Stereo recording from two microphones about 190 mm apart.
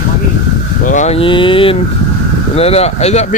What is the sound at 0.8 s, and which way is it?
Speech, 40° left (ahead or behind).